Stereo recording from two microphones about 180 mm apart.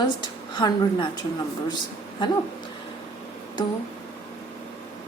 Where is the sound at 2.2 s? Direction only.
25° left (ahead or behind).